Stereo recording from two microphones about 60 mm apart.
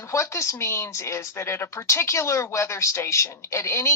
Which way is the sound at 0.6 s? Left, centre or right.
Left.